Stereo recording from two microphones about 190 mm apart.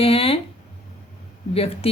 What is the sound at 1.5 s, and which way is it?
Speech, 30° left (ahead or behind).